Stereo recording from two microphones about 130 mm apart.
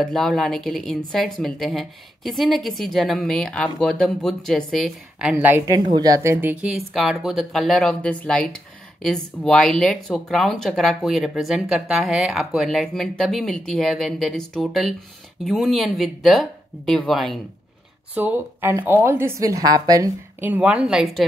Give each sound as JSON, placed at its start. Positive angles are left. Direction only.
{"t": 0.0, "sound": "speech", "side_deg": 5}
{"t": 5.9, "sound": "speech", "side_deg": -25}
{"t": 18.1, "sound": "a woman's voice", "side_deg": -15}
{"t": 20.3, "sound": "speech", "side_deg": -15}